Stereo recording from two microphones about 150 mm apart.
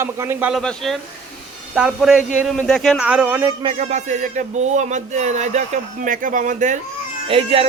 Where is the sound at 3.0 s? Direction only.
10° right (ahead or behind).